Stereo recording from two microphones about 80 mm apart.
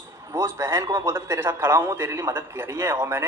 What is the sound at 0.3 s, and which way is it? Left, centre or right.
A man's voice, right.